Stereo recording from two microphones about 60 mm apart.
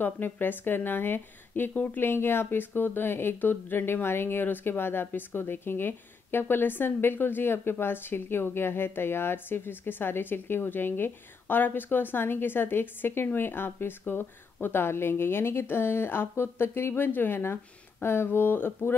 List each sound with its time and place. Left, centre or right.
0.0 s a woman's voice: left